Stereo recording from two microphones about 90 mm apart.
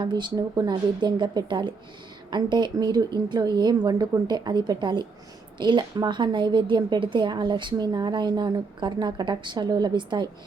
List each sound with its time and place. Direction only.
0.0 s a woman's voice: 55° right (ahead or behind)